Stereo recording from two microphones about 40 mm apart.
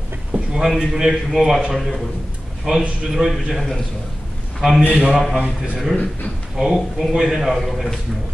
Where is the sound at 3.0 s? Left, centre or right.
Centre.